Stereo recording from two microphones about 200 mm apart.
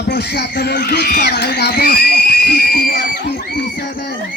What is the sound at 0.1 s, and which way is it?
Speech, 55° left (ahead or behind).